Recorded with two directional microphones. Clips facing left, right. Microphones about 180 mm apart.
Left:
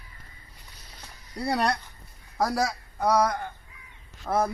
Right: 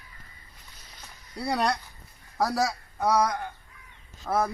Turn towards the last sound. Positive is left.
turn(degrees=5)  # may be behind; listen again after turning